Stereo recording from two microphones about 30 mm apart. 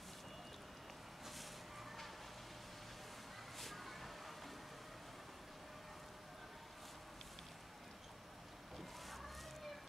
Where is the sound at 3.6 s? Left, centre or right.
Centre.